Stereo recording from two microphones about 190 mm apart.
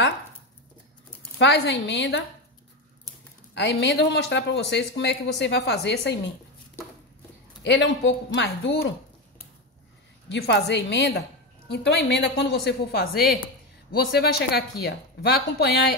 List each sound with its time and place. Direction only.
1.4 s a woman's voice: 60° left (ahead or behind)
3.5 s a woman's voice: 65° left (ahead or behind)
7.6 s speech: 70° left (ahead or behind)
10.3 s a woman's voice: 65° left (ahead or behind)